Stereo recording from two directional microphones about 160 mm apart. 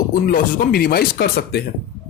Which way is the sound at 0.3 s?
70° left (ahead or behind).